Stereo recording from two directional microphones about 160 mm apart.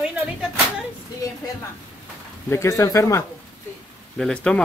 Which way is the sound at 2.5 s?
15° left (ahead or behind).